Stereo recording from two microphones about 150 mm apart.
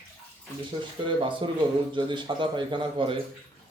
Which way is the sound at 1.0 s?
35° right (ahead or behind).